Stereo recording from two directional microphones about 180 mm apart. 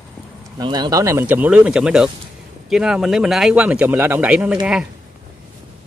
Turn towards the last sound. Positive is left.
turn(degrees=-5)  # may be behind; listen again after turning